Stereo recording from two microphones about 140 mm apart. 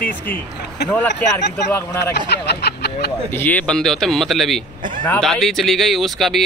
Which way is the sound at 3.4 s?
10° left (ahead or behind).